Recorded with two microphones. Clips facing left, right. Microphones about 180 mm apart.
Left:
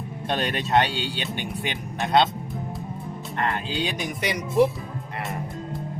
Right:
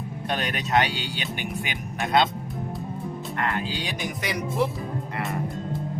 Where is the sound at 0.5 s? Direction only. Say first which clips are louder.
Left 1 dB; 30° left (ahead or behind).